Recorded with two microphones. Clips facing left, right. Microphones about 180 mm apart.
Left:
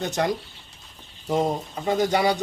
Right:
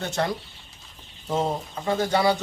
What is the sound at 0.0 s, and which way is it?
Speech, 15° left (ahead or behind).